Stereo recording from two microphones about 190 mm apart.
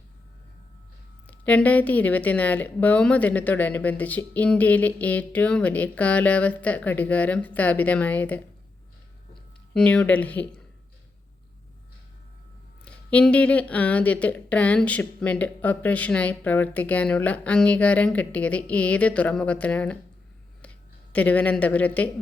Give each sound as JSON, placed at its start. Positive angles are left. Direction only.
{"t": 1.3, "sound": "speech", "side_deg": 5}
{"t": 9.7, "sound": "speech", "side_deg": 5}
{"t": 12.8, "sound": "speech", "side_deg": 5}